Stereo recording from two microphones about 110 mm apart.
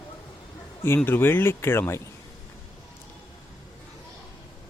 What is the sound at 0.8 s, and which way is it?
Speech, 20° left (ahead or behind).